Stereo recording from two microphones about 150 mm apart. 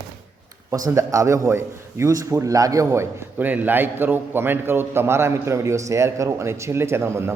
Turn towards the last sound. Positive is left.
turn(degrees=-15)  # may be behind; listen again after turning